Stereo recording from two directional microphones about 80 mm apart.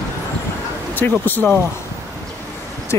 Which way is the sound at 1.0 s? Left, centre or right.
Left.